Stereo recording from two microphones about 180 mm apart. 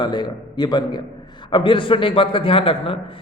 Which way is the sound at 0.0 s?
25° left (ahead or behind).